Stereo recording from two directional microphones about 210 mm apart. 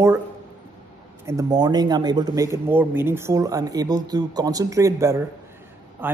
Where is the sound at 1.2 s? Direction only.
15° right (ahead or behind).